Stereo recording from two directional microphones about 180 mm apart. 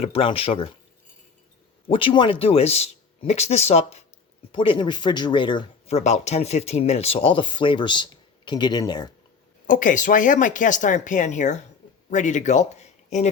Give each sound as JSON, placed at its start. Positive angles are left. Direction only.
{"t": 0.0, "sound": "speech", "side_deg": 30}
{"t": 1.9, "sound": "speech", "side_deg": 30}
{"t": 9.6, "sound": "speech", "side_deg": 45}